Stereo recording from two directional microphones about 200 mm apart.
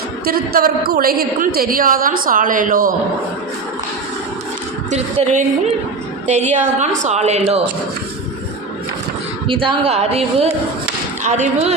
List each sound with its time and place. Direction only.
0.3 s a woman's voice: 50° right (ahead or behind)
4.9 s a woman's voice: 35° right (ahead or behind)
9.5 s a woman's voice: 25° right (ahead or behind)